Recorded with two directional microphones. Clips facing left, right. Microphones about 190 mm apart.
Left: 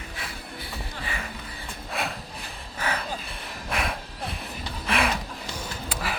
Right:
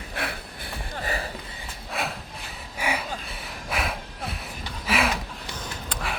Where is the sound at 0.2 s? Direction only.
60° right (ahead or behind).